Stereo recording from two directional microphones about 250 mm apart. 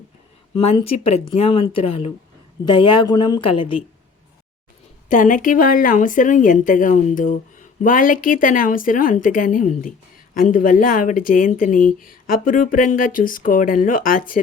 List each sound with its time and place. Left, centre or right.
0.5 s speech: left
5.0 s speech: left